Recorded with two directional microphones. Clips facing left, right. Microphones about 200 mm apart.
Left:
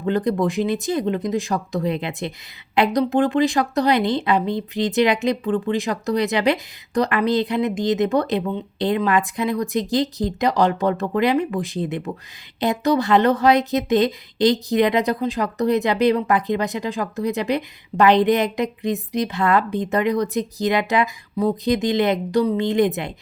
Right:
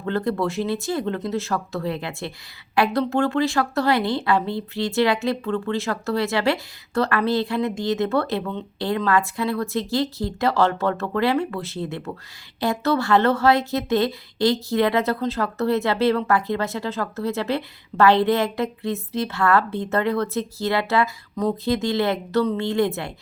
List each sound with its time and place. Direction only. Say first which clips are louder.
0.0 s speech: left 3 dB; 15° left (ahead or behind)